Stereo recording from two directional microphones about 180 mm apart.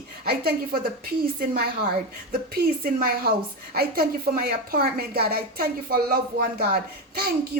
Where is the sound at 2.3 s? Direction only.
55° right (ahead or behind).